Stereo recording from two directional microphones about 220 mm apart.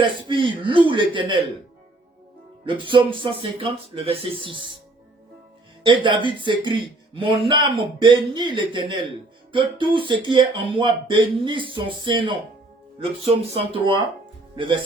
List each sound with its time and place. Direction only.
0.0 s speech: 20° right (ahead or behind)
2.6 s speech: 20° right (ahead or behind)
5.8 s speech: 20° right (ahead or behind)